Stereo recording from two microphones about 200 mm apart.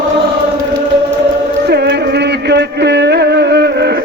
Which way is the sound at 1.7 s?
55° right (ahead or behind).